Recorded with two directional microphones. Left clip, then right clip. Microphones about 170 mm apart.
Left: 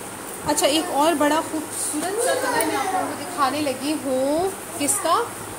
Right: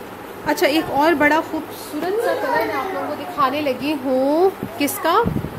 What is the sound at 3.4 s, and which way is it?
Speech, 45° right (ahead or behind).